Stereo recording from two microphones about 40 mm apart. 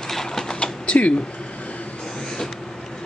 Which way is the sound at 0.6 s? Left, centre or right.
Left.